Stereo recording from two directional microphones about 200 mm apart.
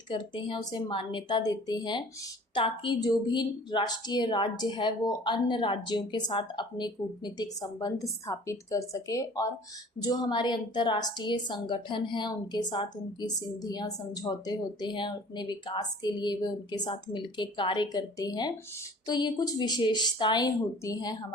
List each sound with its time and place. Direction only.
0.1 s a woman's voice: 25° left (ahead or behind)